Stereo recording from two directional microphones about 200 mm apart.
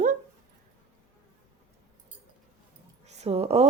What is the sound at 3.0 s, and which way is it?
Speech, 35° right (ahead or behind).